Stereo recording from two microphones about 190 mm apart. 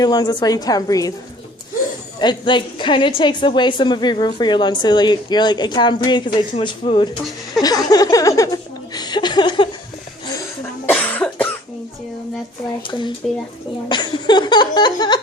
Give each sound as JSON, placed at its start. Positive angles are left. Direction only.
{"t": 0.0, "sound": "a woman's voice", "side_deg": 20}
{"t": 2.1, "sound": "a woman's voice", "side_deg": 25}
{"t": 9.0, "sound": "chuckle", "side_deg": 20}
{"t": 10.8, "sound": "cough", "side_deg": 10}
{"t": 12.9, "sound": "a woman's voice", "side_deg": 25}